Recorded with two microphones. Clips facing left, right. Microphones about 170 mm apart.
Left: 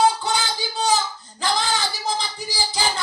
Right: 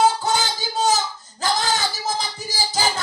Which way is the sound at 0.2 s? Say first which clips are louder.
Right 2 dB; 45° right (ahead or behind).